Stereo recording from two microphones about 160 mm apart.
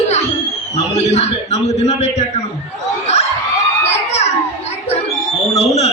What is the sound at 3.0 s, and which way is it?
Crowd, 45° left (ahead or behind).